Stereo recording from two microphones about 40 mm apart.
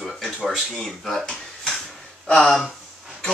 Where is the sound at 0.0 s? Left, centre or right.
Centre.